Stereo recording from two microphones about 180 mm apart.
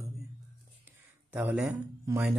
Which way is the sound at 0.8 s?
10° right (ahead or behind).